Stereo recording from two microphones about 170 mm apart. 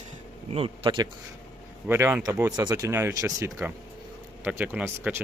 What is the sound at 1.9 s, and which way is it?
Speech, 15° right (ahead or behind).